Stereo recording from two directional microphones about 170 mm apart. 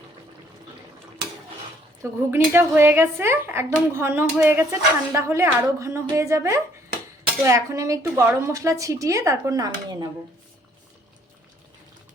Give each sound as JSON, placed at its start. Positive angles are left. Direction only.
{"t": 2.0, "sound": "a woman's voice", "side_deg": -15}